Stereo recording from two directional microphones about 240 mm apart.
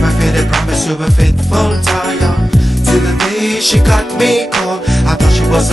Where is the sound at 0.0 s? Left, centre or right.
Centre.